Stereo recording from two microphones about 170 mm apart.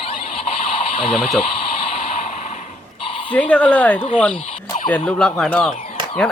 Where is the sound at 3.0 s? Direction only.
35° left (ahead or behind).